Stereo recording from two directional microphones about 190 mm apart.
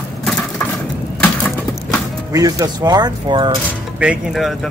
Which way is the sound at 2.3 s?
20° right (ahead or behind).